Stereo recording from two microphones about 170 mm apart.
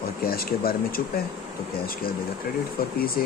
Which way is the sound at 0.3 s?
60° left (ahead or behind).